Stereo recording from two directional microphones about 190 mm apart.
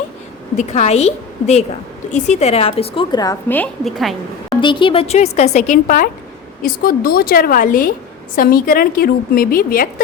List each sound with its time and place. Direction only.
0.5 s a woman's voice: 35° left (ahead or behind)
3.5 s a woman's voice: 5° left (ahead or behind)
4.4 s a woman's voice: 25° left (ahead or behind); by 9.9 s 50° left (ahead or behind)